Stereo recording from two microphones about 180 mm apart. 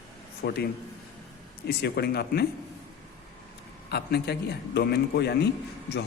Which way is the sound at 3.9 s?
65° left (ahead or behind).